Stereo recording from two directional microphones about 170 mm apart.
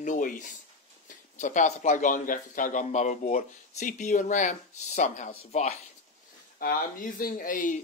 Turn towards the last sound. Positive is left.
turn(degrees=50)  # may be behind; listen again after turning